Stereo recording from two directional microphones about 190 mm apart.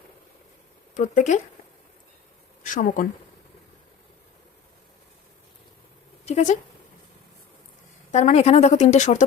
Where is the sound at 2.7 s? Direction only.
45° left (ahead or behind).